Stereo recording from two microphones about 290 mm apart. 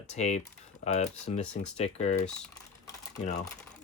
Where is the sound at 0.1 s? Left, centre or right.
Left.